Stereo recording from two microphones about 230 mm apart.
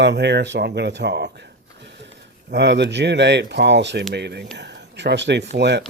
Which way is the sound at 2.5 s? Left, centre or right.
Right.